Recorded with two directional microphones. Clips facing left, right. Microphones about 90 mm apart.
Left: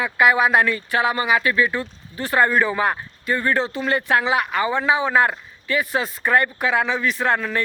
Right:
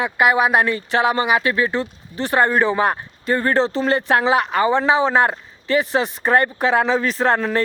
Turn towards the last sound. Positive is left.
turn(degrees=-35)  # may be behind; listen again after turning